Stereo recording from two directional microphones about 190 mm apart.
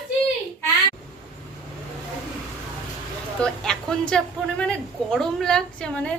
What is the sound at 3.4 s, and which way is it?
A woman's voice, 5° left (ahead or behind).